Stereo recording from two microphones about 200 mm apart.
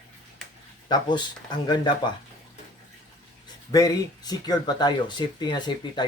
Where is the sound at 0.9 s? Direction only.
20° left (ahead or behind).